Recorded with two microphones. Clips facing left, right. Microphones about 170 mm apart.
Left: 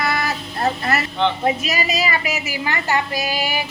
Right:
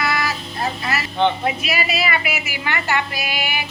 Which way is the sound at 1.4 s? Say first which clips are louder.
Left 2 dB; 40° left (ahead or behind).